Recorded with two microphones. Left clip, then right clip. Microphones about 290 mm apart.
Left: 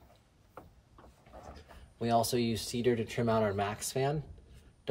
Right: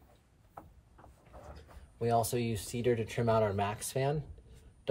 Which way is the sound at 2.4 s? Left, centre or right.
Centre.